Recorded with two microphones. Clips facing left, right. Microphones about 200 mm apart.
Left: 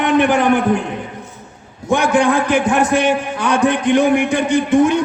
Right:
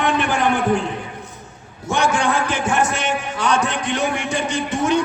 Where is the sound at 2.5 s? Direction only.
60° left (ahead or behind).